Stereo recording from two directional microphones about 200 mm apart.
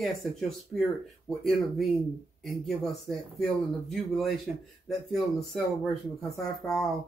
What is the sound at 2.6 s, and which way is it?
Speech, centre (ahead or behind).